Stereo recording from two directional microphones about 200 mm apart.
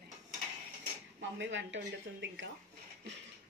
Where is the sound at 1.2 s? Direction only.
65° right (ahead or behind).